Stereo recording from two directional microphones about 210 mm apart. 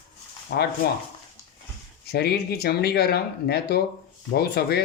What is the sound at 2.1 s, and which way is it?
Speech, 50° left (ahead or behind).